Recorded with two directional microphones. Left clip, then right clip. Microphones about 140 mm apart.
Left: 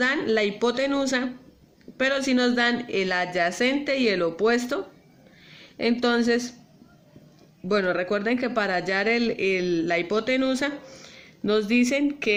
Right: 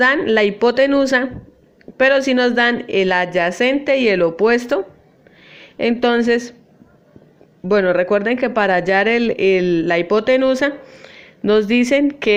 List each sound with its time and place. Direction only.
0.0 s speech: 25° right (ahead or behind)
7.7 s speech: 20° right (ahead or behind)